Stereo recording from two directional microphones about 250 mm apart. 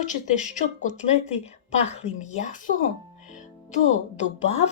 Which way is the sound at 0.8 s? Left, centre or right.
Left.